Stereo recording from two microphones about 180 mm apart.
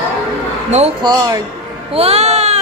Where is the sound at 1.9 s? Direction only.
35° right (ahead or behind).